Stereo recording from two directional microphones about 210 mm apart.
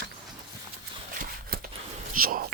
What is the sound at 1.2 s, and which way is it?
Horse, 45° right (ahead or behind).